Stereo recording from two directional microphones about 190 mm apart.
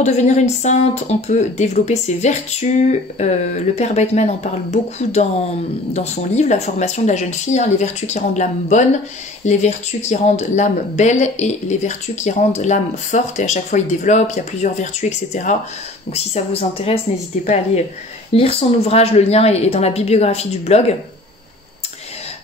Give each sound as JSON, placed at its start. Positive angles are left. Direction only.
{"t": 0.0, "sound": "speech", "side_deg": 35}
{"t": 18.3, "sound": "speech", "side_deg": 30}